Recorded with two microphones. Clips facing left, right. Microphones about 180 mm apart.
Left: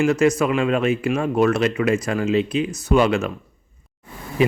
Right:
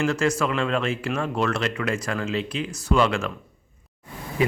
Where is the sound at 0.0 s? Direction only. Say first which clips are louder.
Left 5 dB; 20° left (ahead or behind).